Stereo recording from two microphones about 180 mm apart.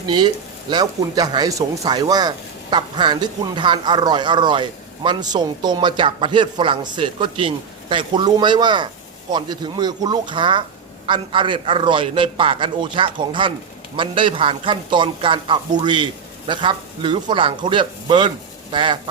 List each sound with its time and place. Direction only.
0.7 s speech: 20° right (ahead or behind)